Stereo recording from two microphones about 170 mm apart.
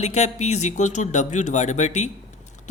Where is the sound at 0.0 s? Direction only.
40° left (ahead or behind).